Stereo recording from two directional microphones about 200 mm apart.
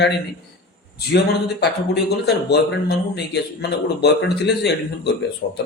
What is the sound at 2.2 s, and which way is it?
A man's voice, 55° left (ahead or behind).